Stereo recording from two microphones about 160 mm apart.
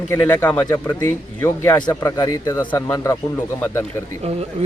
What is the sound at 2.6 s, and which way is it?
Speech, 30° left (ahead or behind).